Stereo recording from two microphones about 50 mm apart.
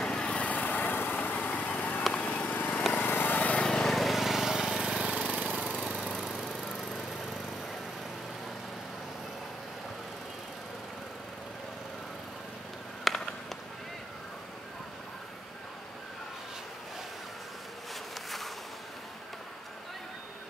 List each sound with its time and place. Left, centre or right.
0.0 s vehicle: centre
0.6 s vehicle: left
2.1 s a sound: left
2.9 s vehicle: left
3.3 s lawn mower: left
3.6 s lawn mower: centre
3.9 s lawn mower: centre; by 5.4 s right
5.4 s lawn mower: centre
6.7 s a sound: centre
13.0 s a sound: centre